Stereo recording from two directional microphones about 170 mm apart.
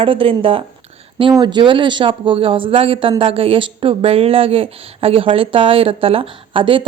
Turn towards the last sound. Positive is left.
turn(degrees=-30)  # may be behind; listen again after turning